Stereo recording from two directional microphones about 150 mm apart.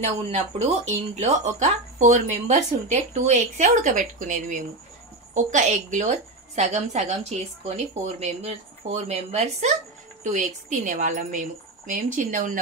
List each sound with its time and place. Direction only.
0.0 s speech: 45° right (ahead or behind); by 12.5 s 60° right (ahead or behind)